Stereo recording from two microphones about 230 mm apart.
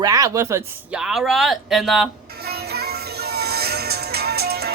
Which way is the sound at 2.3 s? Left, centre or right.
Right.